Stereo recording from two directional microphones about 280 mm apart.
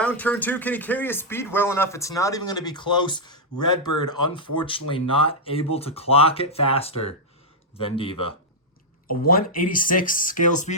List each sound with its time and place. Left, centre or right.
0.0 s speech: centre
9.0 s speech: left